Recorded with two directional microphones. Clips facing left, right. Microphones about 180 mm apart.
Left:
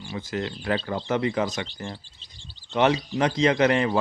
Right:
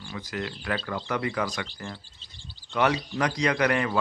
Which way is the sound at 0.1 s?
25° left (ahead or behind).